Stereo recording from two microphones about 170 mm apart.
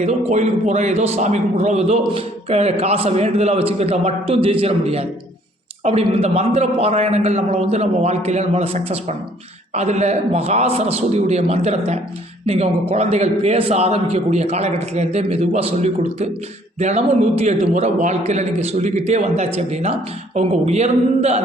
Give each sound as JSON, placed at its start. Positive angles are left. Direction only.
{"t": 0.0, "sound": "a man's voice", "side_deg": -40}